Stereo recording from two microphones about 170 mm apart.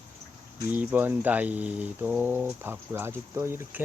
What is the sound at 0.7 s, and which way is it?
Speech, 10° right (ahead or behind).